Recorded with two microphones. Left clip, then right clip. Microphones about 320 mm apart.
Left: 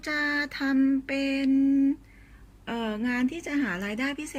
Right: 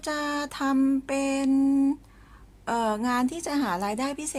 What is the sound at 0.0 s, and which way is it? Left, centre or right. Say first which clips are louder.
Mantra: left 2 dB; centre.